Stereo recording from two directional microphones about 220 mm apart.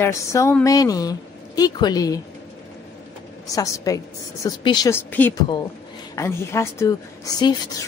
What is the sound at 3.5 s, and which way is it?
A woman's voice, 15° left (ahead or behind).